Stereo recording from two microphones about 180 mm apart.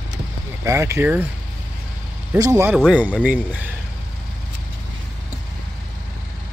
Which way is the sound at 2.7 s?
5° right (ahead or behind).